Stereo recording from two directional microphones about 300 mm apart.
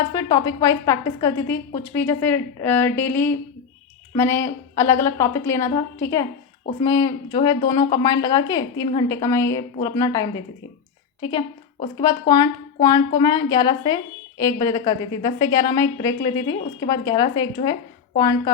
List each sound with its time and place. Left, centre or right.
0.1 s a woman's voice: centre
7.6 s speech: left
7.9 s a woman's voice: centre